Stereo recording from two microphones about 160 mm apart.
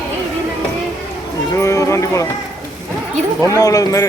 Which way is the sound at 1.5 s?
20° left (ahead or behind).